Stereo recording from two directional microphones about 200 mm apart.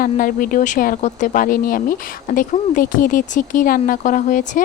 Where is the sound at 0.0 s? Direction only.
45° left (ahead or behind).